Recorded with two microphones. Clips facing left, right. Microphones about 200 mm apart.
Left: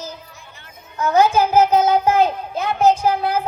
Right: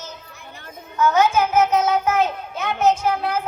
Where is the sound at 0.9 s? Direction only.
35° left (ahead or behind).